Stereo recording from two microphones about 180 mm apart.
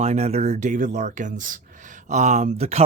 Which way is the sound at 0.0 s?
35° right (ahead or behind).